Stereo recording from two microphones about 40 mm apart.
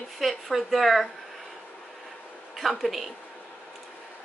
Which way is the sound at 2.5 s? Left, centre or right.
Centre.